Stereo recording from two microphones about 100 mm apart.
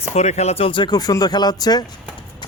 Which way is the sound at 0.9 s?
40° left (ahead or behind).